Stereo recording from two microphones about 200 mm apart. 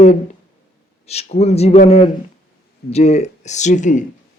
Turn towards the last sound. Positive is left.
turn(degrees=40)  # may be behind; listen again after turning